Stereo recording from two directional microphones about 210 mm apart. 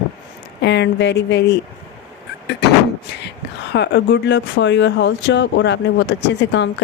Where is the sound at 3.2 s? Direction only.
55° left (ahead or behind).